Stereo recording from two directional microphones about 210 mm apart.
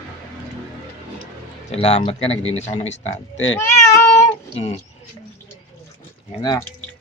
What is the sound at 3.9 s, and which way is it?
Cat, 15° left (ahead or behind).